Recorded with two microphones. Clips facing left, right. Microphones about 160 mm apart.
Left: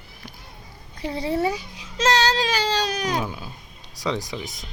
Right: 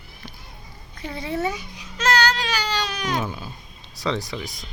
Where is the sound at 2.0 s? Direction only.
30° left (ahead or behind).